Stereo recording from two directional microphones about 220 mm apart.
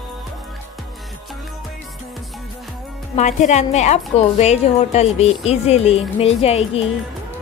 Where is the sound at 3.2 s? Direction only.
30° left (ahead or behind).